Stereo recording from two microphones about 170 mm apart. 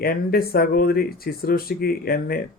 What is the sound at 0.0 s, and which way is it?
Speech, 65° left (ahead or behind).